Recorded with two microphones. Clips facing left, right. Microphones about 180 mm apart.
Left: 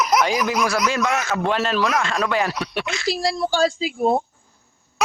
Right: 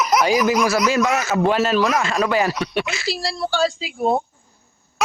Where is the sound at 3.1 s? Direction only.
45° left (ahead or behind).